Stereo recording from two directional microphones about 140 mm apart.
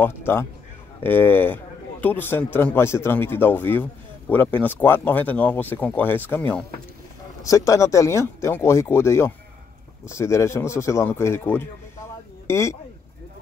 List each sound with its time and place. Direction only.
0.0 s a man's voice: 15° left (ahead or behind)